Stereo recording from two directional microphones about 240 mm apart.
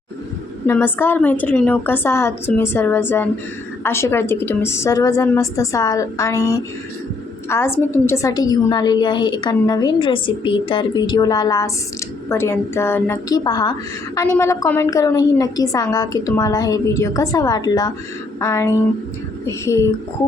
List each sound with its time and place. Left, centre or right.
0.7 s a woman's voice: centre